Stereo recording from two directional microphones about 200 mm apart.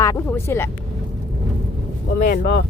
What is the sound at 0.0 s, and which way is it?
Speech, 15° left (ahead or behind).